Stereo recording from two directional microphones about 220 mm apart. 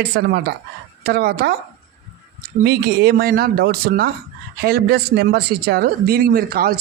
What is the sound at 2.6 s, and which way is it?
Speech, 45° right (ahead or behind).